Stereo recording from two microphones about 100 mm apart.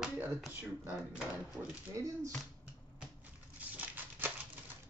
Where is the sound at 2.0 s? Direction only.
35° right (ahead or behind).